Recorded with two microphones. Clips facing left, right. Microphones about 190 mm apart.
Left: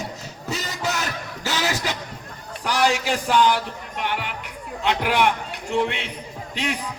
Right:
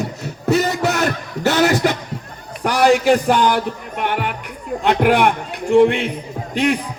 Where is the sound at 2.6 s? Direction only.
55° right (ahead or behind).